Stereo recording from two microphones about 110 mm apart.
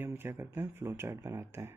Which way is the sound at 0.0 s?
20° right (ahead or behind).